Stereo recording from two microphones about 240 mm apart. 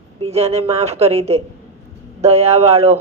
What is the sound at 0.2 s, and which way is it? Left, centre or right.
A woman's voice, right.